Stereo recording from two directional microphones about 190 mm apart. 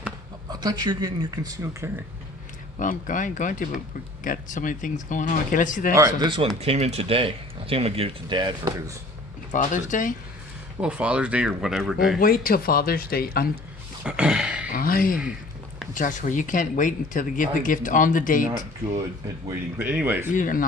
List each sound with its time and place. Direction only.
0.6 s speech: 20° right (ahead or behind)
2.7 s speech: 45° left (ahead or behind)
6.1 s speech: 25° right (ahead or behind)
9.5 s speech: 40° left (ahead or behind)
10.8 s speech: 5° right (ahead or behind)
12.2 s speech: 50° left (ahead or behind)
14.0 s a sound: 5° right (ahead or behind)
14.7 s speech: 50° left (ahead or behind)
19.8 s speech: 10° right (ahead or behind)
20.3 s speech: 45° left (ahead or behind)